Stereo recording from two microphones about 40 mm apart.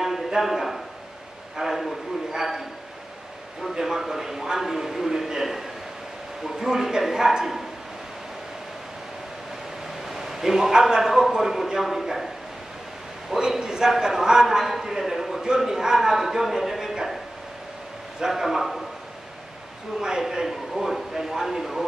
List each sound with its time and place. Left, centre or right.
0.0 s a sound: centre
1.6 s a man's voice: centre
3.8 s a man's voice: centre
10.0 s a man's voice: centre
13.4 s a man's voice: centre
18.2 s a man's voice: centre
20.0 s a man's voice: centre